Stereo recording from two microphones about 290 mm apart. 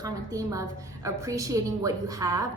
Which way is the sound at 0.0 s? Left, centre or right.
Centre.